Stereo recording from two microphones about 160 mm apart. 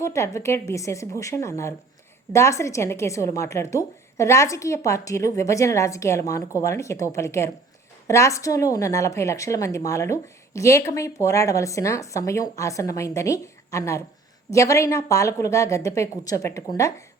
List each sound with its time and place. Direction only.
0.0 s a woman's voice: 20° left (ahead or behind)